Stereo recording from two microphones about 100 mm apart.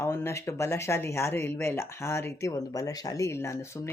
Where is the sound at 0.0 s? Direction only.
25° left (ahead or behind).